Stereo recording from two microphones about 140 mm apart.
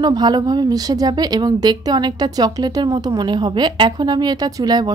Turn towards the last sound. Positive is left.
turn(degrees=-30)  # may be behind; listen again after turning